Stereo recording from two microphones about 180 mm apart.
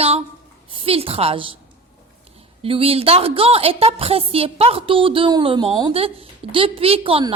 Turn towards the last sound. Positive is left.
turn(degrees=-30)  # may be behind; listen again after turning